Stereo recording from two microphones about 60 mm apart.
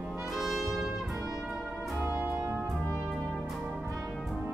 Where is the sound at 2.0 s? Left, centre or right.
Right.